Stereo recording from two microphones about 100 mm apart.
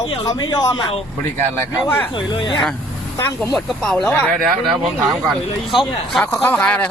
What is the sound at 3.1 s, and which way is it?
Speech, 20° left (ahead or behind).